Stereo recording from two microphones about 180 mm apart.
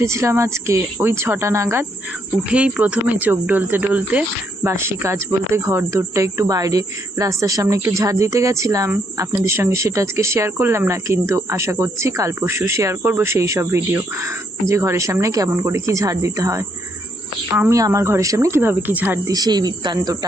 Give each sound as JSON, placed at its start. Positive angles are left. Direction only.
{"t": 0.0, "sound": "speech", "side_deg": -15}